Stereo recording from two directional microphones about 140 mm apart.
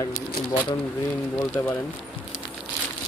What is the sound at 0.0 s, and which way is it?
Speech, 35° left (ahead or behind).